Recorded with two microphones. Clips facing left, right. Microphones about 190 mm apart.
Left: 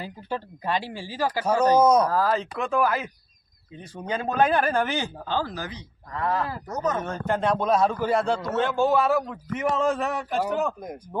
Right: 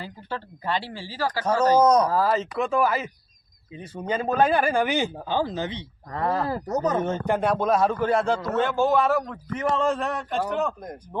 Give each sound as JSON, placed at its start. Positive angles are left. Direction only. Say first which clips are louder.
{"t": 0.0, "sound": "speech", "louder": "left 2 dB", "side_deg": 15}
{"t": 2.0, "sound": "a man's voice", "louder": "right 1 dB", "side_deg": -10}
{"t": 6.1, "sound": "speech", "louder": "right 2 dB", "side_deg": -40}
{"t": 7.3, "sound": "a man's voice", "louder": "left 1 dB", "side_deg": -10}